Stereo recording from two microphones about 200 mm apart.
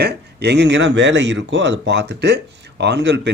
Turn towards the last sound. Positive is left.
turn(degrees=-60)  # may be behind; listen again after turning